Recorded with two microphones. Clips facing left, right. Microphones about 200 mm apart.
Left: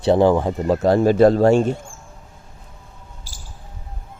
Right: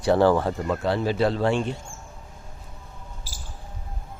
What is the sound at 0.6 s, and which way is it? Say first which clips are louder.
Speech: left 8 dB; 40° left (ahead or behind).